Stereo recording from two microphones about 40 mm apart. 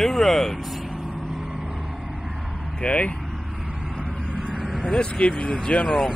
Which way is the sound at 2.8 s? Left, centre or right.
Left.